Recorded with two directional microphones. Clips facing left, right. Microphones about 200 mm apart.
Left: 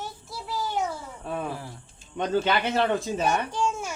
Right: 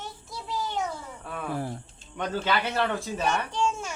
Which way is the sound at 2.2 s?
20° left (ahead or behind).